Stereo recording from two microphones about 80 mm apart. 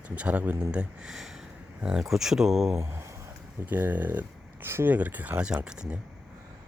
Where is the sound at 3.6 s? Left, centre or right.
Right.